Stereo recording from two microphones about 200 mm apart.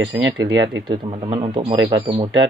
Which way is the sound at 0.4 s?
20° right (ahead or behind).